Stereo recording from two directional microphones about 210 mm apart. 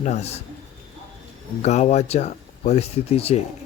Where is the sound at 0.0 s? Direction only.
30° left (ahead or behind).